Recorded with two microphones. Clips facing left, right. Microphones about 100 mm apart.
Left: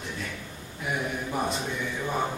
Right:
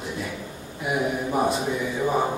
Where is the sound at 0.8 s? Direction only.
5° right (ahead or behind).